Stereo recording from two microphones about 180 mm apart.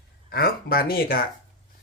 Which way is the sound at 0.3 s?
55° left (ahead or behind).